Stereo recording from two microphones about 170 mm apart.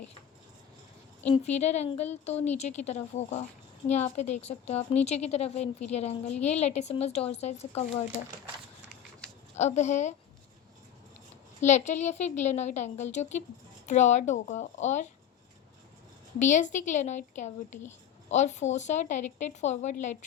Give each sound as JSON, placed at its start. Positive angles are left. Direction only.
{"t": 1.3, "sound": "a woman's voice", "side_deg": 40}
{"t": 9.6, "sound": "a woman's voice", "side_deg": 45}
{"t": 11.6, "sound": "a woman's voice", "side_deg": 45}
{"t": 16.4, "sound": "a woman's voice", "side_deg": 45}